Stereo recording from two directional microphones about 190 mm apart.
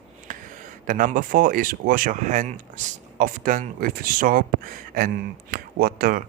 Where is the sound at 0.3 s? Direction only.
45° right (ahead or behind).